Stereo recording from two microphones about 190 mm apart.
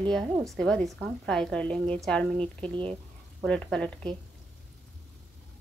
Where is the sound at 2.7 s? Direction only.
25° right (ahead or behind).